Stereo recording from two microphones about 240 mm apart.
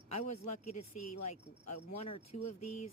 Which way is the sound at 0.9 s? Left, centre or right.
Left.